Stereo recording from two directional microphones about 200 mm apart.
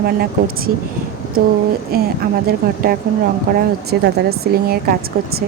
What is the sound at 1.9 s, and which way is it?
Speech, 50° right (ahead or behind).